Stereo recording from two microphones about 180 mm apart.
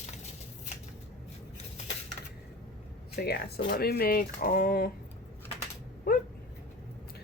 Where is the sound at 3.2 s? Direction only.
65° left (ahead or behind).